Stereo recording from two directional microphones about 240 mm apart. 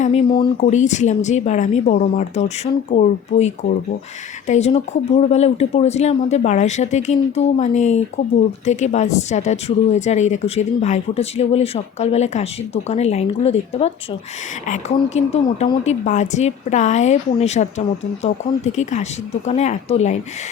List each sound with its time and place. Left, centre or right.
0.0 s speech: left